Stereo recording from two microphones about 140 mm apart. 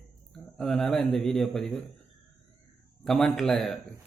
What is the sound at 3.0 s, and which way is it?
Speech, 5° left (ahead or behind).